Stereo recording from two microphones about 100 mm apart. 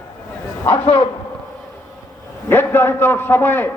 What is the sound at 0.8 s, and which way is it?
Speech, 85° left.